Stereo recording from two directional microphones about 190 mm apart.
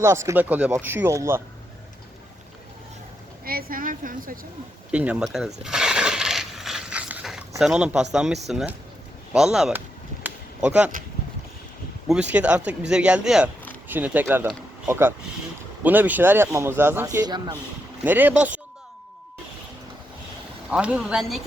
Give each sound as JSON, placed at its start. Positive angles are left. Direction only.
{"t": 0.0, "sound": "speech", "side_deg": -15}
{"t": 3.4, "sound": "a woman's voice", "side_deg": -50}
{"t": 4.9, "sound": "speech", "side_deg": -5}
{"t": 5.6, "sound": "a sound", "side_deg": -5}
{"t": 7.6, "sound": "speech", "side_deg": -5}
{"t": 10.2, "sound": "a sound", "side_deg": -5}
{"t": 12.0, "sound": "speech", "side_deg": -5}
{"t": 20.7, "sound": "speech", "side_deg": -5}